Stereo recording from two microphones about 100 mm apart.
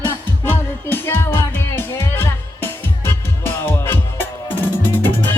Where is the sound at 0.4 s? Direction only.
20° left (ahead or behind).